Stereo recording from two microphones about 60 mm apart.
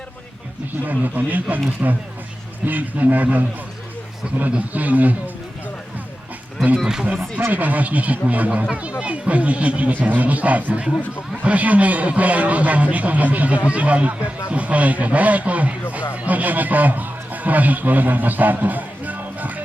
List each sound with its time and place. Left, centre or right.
0.9 s speech: right
2.6 s speech: right
7.3 s a man's voice: right